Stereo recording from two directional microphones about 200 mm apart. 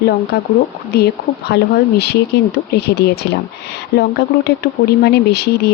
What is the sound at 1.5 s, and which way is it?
Speech, 55° left (ahead or behind).